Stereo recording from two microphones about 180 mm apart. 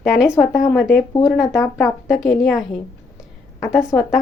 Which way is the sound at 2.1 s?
Centre (ahead or behind).